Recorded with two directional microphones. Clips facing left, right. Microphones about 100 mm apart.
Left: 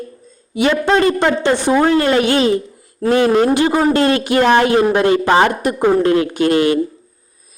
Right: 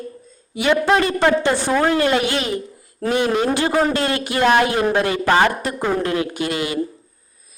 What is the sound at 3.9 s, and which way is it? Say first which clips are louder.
Speech: left 7 dB; 25° left (ahead or behind).